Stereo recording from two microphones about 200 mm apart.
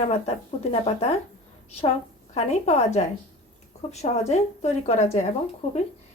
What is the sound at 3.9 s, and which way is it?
Speech, 35° left (ahead or behind).